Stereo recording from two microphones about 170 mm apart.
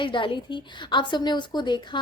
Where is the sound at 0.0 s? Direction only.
30° left (ahead or behind).